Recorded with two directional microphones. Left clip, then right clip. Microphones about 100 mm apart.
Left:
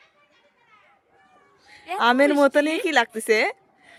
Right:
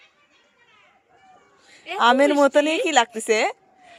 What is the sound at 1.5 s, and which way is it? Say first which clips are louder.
A woman's voice: right 2 dB; 30° left (ahead or behind).